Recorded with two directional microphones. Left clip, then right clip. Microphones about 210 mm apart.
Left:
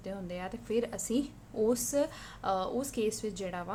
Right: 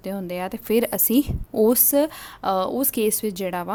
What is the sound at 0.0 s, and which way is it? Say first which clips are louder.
A woman's voice: right 11 dB; 50° right (ahead or behind).